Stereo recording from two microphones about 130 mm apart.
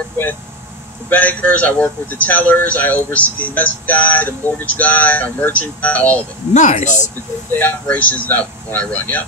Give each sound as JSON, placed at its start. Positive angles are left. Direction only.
{"t": 1.1, "sound": "a man's voice", "side_deg": 10}
{"t": 6.5, "sound": "speech", "side_deg": 70}
{"t": 7.5, "sound": "a man's voice", "side_deg": 15}